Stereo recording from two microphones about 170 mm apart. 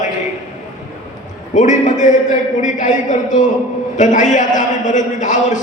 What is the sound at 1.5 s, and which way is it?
A man's voice, 45° left (ahead or behind).